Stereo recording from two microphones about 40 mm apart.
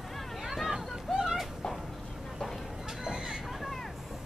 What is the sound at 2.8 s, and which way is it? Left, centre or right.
Vehicle, centre.